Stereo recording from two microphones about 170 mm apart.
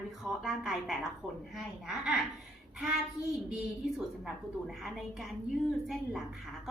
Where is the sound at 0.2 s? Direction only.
5° right (ahead or behind).